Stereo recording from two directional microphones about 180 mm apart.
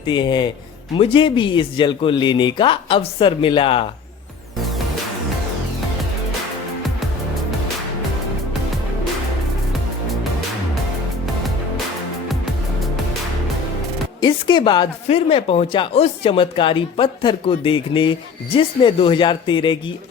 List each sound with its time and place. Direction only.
0.0 s speech: 25° left (ahead or behind)
14.2 s music: 25° left (ahead or behind)
15.0 s speech: 30° left (ahead or behind)